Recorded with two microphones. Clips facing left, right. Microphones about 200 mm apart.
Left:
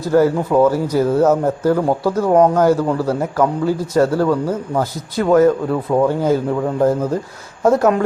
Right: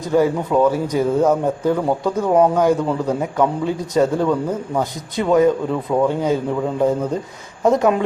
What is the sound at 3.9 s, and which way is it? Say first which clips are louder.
Speech: left 1 dB; 20° right (ahead or behind).